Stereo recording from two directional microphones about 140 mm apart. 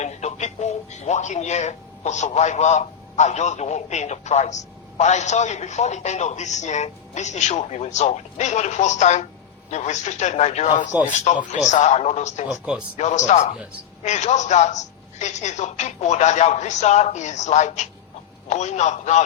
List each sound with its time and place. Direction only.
0.0 s a man's voice: 55° left (ahead or behind)
12.5 s speech: 5° right (ahead or behind)
13.0 s a woman's voice: 55° left (ahead or behind)